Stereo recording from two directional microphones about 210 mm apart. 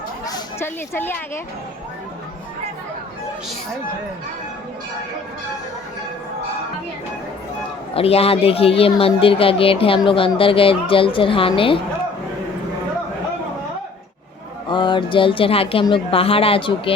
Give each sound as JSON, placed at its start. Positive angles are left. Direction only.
{"t": 0.3, "sound": "a sound", "side_deg": 15}
{"t": 7.9, "sound": "speech", "side_deg": 30}
{"t": 14.7, "sound": "speech", "side_deg": 20}